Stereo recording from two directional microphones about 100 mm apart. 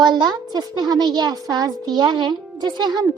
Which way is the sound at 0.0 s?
45° right (ahead or behind).